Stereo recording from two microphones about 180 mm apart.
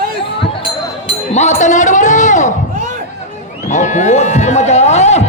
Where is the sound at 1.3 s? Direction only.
40° left (ahead or behind).